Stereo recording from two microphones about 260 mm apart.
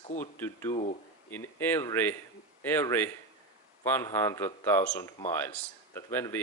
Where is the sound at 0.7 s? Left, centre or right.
Left.